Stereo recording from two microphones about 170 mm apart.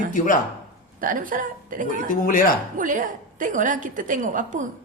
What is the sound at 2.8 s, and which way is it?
A woman's voice, 50° right (ahead or behind).